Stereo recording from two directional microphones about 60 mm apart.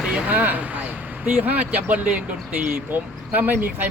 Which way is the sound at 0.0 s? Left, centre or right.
Centre.